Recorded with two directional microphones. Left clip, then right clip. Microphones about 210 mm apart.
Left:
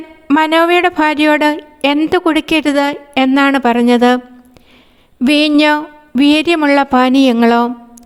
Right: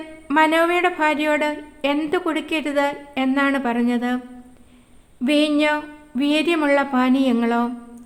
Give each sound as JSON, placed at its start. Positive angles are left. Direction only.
{"t": 0.3, "sound": "a woman's voice", "side_deg": 40}
{"t": 5.2, "sound": "speech", "side_deg": 40}